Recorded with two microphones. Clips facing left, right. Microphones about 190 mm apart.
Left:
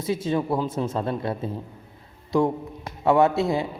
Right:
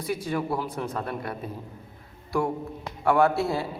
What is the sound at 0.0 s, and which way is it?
A man's voice, 25° left (ahead or behind).